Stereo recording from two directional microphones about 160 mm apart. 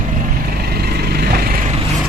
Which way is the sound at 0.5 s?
75° right (ahead or behind).